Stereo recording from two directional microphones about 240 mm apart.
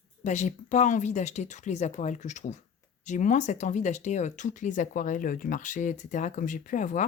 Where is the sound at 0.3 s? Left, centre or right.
Left.